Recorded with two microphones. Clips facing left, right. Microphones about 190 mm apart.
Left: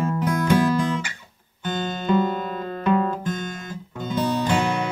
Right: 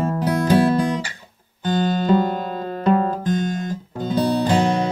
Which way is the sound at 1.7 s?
35° right (ahead or behind).